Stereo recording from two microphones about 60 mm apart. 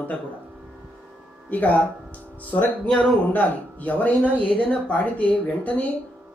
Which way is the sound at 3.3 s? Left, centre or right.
Left.